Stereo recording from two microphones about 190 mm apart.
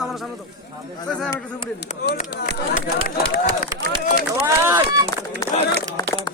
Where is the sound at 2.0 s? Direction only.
50° left (ahead or behind).